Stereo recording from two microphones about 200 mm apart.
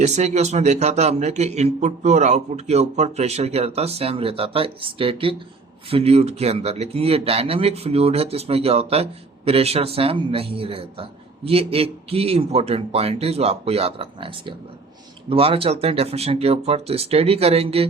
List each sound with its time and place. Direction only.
0.0 s a man's voice: 35° right (ahead or behind)